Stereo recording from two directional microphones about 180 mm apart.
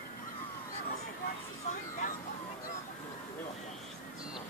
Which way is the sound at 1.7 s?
45° left (ahead or behind).